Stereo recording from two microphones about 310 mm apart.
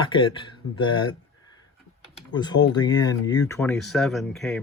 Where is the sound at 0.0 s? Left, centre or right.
Centre.